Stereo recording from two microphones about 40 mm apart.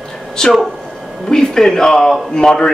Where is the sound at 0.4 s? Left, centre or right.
Centre.